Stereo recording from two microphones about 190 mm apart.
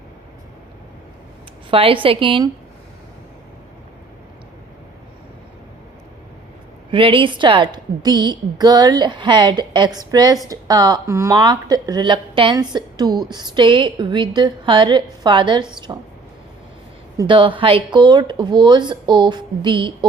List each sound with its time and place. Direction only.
1.7 s speech: 30° right (ahead or behind)
6.9 s speech: 25° right (ahead or behind)
17.2 s speech: 25° right (ahead or behind)